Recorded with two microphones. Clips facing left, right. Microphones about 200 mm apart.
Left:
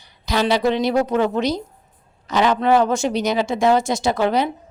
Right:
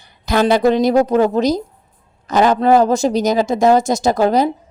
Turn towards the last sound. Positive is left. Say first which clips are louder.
# right 5 dB
turn(degrees=-40)  # may be behind; listen again after turning